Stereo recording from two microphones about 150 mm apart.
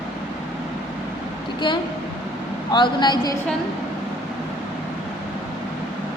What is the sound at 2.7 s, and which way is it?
Speech, 30° left (ahead or behind).